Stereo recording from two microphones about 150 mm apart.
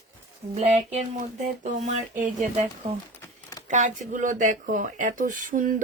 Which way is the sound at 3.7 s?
55° right (ahead or behind).